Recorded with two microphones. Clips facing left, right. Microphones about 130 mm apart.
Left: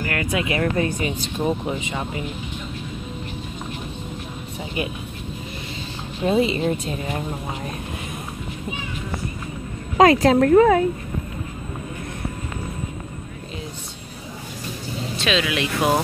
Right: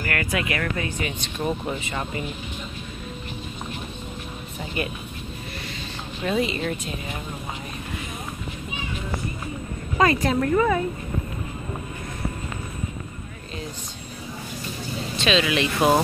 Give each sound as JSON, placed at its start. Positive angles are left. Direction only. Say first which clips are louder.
{"t": 0.0, "sound": "speech", "louder": "left 2 dB", "side_deg": 20}
{"t": 1.4, "sound": "speech", "louder": "left 3 dB", "side_deg": 15}
{"t": 6.2, "sound": "speech", "louder": "left 5 dB", "side_deg": 25}
{"t": 9.9, "sound": "speech", "louder": "left 7 dB", "side_deg": 90}
{"t": 15.1, "sound": "speech", "louder": "right 1 dB", "side_deg": 5}